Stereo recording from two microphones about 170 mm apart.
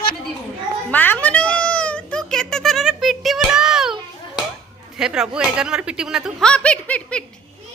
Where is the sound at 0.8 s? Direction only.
10° left (ahead or behind).